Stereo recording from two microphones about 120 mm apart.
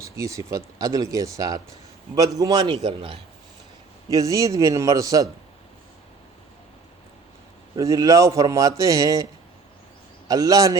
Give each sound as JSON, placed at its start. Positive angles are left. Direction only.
{"t": 0.0, "sound": "a man's voice", "side_deg": -25}
{"t": 2.8, "sound": "a man's voice", "side_deg": -45}
{"t": 4.1, "sound": "speech", "side_deg": -30}
{"t": 7.8, "sound": "speech", "side_deg": -30}
{"t": 10.2, "sound": "a man's voice", "side_deg": -30}